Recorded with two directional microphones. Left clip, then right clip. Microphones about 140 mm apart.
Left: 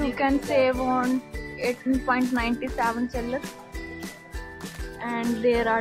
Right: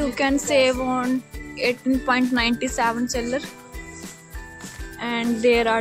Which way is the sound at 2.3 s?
40° right (ahead or behind).